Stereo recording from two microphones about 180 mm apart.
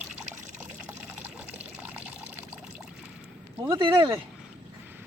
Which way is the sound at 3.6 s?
25° right (ahead or behind).